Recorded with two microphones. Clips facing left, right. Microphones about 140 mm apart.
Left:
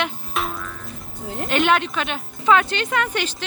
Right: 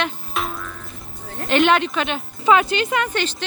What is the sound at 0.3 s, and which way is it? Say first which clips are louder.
Music: left 1 dB; centre (ahead or behind).